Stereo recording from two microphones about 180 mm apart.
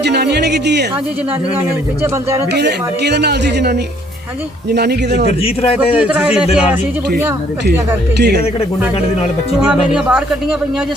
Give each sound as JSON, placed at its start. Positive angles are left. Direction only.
{"t": 0.0, "sound": "speech", "side_deg": -65}
{"t": 2.6, "sound": "speech", "side_deg": -65}
{"t": 5.4, "sound": "a man's voice", "side_deg": 30}
{"t": 6.0, "sound": "speech", "side_deg": -5}
{"t": 8.2, "sound": "speech", "side_deg": -65}
{"t": 9.6, "sound": "speech", "side_deg": -5}